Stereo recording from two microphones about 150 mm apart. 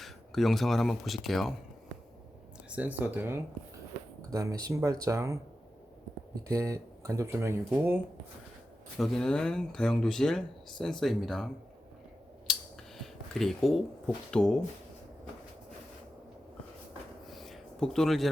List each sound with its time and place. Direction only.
0.0 s speech: centre (ahead or behind)
2.6 s speech: 10° right (ahead or behind)
6.5 s speech: 20° right (ahead or behind)
9.0 s speech: 5° left (ahead or behind)
12.5 s a sound: centre (ahead or behind)
14.3 s speech: 5° left (ahead or behind)
17.2 s a sound: centre (ahead or behind)